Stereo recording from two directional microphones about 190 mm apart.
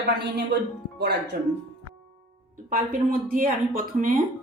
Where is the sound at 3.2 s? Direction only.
45° right (ahead or behind).